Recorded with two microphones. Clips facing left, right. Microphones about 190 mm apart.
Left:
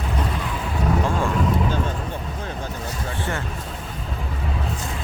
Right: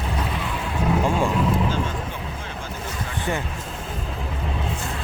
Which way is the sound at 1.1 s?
15° right (ahead or behind).